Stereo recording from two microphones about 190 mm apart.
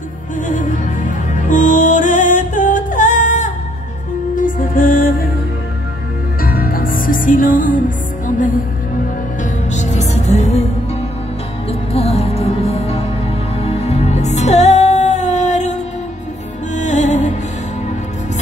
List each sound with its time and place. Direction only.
1.3 s music: 40° left (ahead or behind)
6.4 s music: 50° left (ahead or behind)
9.4 s music: 40° left (ahead or behind)
11.9 s music: 30° left (ahead or behind)